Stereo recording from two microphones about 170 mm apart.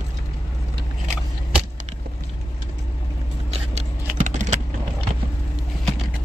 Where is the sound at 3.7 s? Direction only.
45° right (ahead or behind).